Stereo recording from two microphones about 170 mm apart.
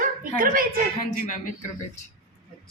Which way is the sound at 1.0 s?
50° left (ahead or behind).